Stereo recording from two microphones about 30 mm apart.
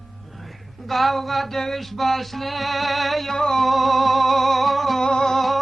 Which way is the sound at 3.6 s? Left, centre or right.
Centre.